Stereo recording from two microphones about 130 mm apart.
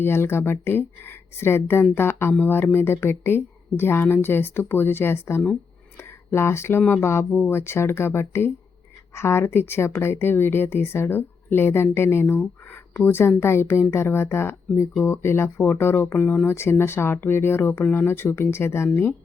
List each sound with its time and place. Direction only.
0.0 s speech: 20° left (ahead or behind)